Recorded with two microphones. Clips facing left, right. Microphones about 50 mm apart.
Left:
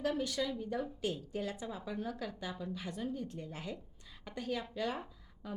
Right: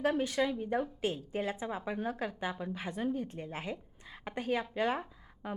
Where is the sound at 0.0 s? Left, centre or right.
Right.